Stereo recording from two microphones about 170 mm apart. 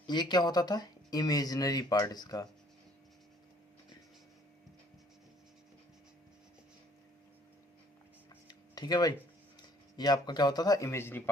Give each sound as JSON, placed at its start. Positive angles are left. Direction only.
{"t": 0.1, "sound": "speech", "side_deg": 25}
{"t": 8.4, "sound": "tick-tock", "side_deg": 25}
{"t": 9.6, "sound": "speech", "side_deg": 25}